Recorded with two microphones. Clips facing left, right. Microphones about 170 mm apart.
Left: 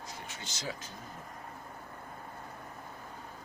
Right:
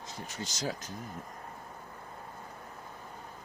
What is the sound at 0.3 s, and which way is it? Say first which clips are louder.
Speech: right 6 dB; 40° right (ahead or behind).